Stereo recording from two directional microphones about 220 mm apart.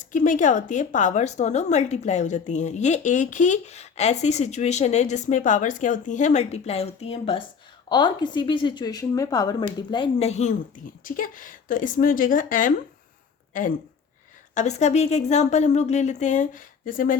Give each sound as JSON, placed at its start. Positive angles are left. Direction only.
{"t": 0.0, "sound": "a woman's voice", "side_deg": 35}